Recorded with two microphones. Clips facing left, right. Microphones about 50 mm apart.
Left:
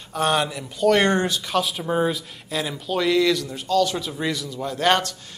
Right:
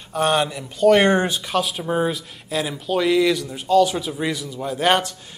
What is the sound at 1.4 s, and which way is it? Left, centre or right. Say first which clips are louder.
Speech: right 1 dB; centre.